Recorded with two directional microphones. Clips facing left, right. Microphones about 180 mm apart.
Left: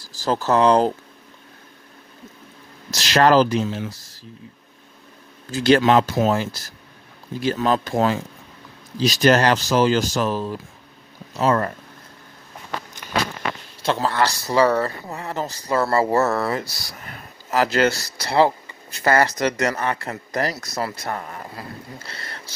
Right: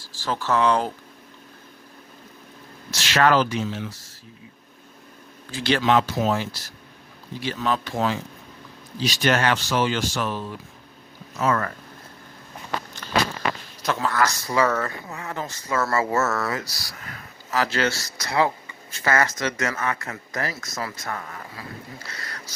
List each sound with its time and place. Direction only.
0.0 s speech: 40° left (ahead or behind)
2.9 s speech: 35° left (ahead or behind)
5.5 s speech: 45° left (ahead or behind)
13.8 s speech: 30° left (ahead or behind)
17.5 s speech: 35° left (ahead or behind)